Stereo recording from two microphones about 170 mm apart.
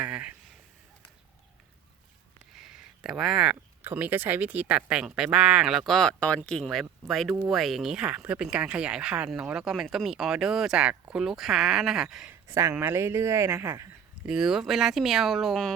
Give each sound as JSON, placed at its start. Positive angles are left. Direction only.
{"t": 0.0, "sound": "speech", "side_deg": -5}
{"t": 2.6, "sound": "speech", "side_deg": -5}
{"t": 12.5, "sound": "a woman's voice", "side_deg": -20}
{"t": 14.3, "sound": "speech", "side_deg": -5}